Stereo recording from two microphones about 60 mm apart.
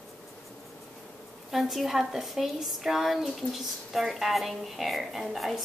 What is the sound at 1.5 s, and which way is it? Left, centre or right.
A woman's voice, centre.